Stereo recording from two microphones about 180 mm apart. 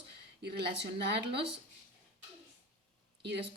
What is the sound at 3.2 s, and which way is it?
Speech, 70° right (ahead or behind).